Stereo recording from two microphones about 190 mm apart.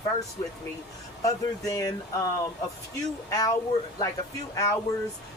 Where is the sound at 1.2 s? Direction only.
15° left (ahead or behind).